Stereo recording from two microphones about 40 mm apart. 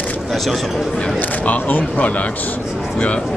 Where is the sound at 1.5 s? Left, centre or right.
Left.